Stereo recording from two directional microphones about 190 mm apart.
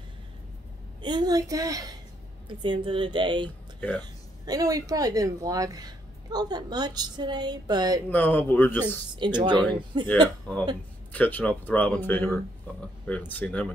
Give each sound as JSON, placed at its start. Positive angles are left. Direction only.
{"t": 1.0, "sound": "speech", "side_deg": -20}
{"t": 3.4, "sound": "speech", "side_deg": 10}
{"t": 4.0, "sound": "speech", "side_deg": -20}
{"t": 8.1, "sound": "speech", "side_deg": 10}
{"t": 9.1, "sound": "speech", "side_deg": -25}
{"t": 11.1, "sound": "speech", "side_deg": 10}